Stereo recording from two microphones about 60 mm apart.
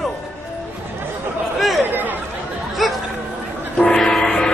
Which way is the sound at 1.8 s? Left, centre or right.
Right.